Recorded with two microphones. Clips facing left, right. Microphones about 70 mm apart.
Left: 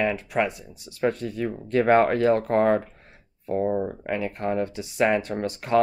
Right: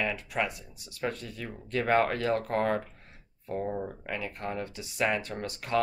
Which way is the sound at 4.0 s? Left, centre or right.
Left.